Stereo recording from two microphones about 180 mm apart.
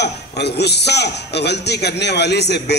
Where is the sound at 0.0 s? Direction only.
70° left (ahead or behind).